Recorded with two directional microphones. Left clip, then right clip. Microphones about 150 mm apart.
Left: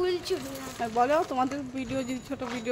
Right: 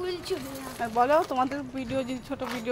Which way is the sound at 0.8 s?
5° right (ahead or behind).